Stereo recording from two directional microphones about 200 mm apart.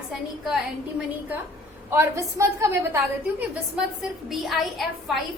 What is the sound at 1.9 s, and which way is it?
Speech, 15° right (ahead or behind).